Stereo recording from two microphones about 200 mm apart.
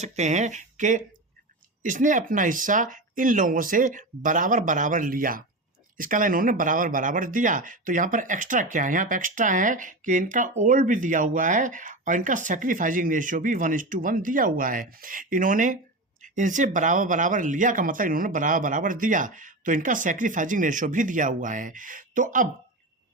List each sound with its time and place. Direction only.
0.0 s speech: 35° right (ahead or behind)